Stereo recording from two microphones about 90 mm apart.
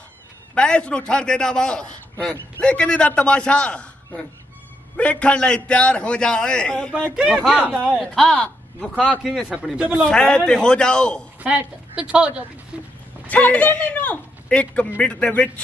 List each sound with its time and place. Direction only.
0.6 s a man's voice: 10° left (ahead or behind)
7.7 s speech: 15° right (ahead or behind)
8.2 s speech: 10° left (ahead or behind)
9.2 s speech: centre (ahead or behind)
9.5 s speech: 15° right (ahead or behind)
10.0 s a man's voice: 10° left (ahead or behind)
11.4 s speech: 10° right (ahead or behind)
13.3 s a man's voice: 15° left (ahead or behind)